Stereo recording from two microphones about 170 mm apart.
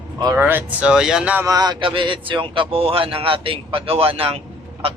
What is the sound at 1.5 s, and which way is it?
Speech, 25° right (ahead or behind).